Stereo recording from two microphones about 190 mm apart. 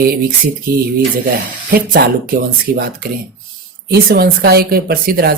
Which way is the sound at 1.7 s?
50° right (ahead or behind).